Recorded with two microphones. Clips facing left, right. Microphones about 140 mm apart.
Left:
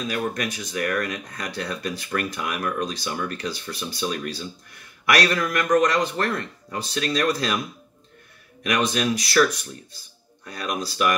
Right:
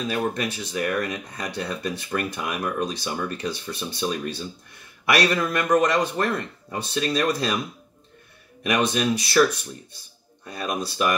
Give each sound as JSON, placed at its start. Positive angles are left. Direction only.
{"t": 0.1, "sound": "speech", "side_deg": -30}
{"t": 8.6, "sound": "speech", "side_deg": -25}
{"t": 10.4, "sound": "speech", "side_deg": -25}